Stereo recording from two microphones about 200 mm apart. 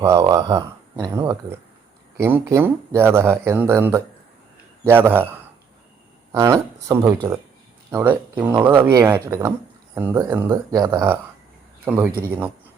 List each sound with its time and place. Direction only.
0.0 s speech: 15° right (ahead or behind)